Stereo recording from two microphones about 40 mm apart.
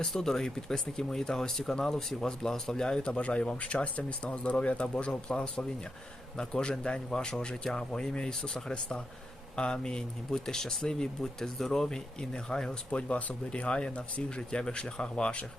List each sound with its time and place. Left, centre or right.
0.1 s speech: centre
3.1 s speech: left
12.9 s speech: left